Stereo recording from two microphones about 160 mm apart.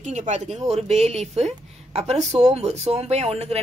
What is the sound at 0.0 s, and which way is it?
Speech, 50° right (ahead or behind).